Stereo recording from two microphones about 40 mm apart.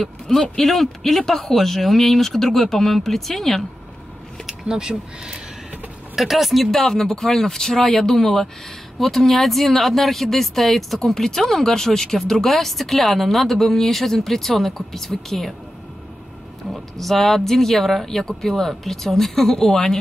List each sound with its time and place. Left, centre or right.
0.0 s speech: centre
4.5 s speech: centre
6.1 s speech: centre
16.7 s speech: centre